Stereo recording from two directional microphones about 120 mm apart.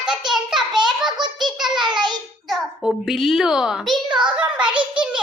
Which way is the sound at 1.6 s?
5° right (ahead or behind).